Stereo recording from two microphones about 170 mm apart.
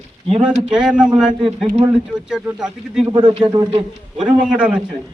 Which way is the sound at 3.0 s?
25° right (ahead or behind).